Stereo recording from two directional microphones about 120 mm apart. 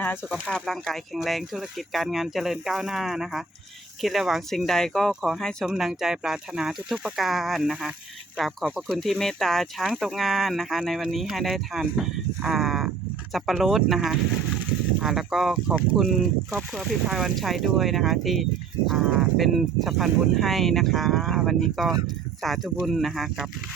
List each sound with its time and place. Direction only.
0.0 s speech: 15° left (ahead or behind)
0.4 s speech: 5° left (ahead or behind); by 9.0 s 10° right (ahead or behind)
9.0 s speech: centre (ahead or behind)